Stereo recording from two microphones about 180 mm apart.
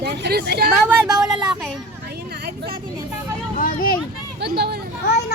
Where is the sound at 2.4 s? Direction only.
60° right (ahead or behind).